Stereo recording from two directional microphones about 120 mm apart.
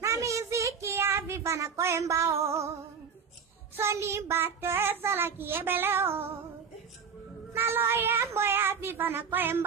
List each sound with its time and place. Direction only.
0.0 s a sound: 25° right (ahead or behind)
3.7 s child singing: 25° right (ahead or behind)
7.5 s child singing: 20° right (ahead or behind)